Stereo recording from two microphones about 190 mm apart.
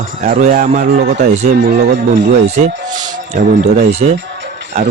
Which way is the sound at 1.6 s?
60° right (ahead or behind).